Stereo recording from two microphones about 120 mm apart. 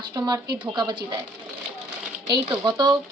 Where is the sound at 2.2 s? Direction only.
35° right (ahead or behind).